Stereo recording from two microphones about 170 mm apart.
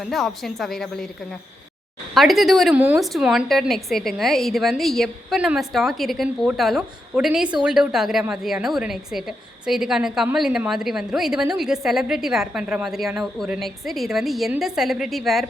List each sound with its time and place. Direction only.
0.0 s a woman's voice: centre (ahead or behind)
2.1 s a woman's voice: centre (ahead or behind)